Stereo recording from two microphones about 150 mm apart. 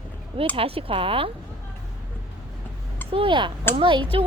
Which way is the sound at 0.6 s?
40° right (ahead or behind).